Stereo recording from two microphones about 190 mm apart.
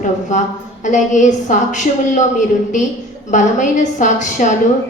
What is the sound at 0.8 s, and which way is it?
A woman's voice, 40° left (ahead or behind).